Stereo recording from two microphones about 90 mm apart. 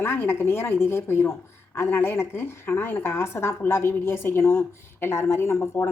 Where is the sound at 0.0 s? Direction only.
30° left (ahead or behind).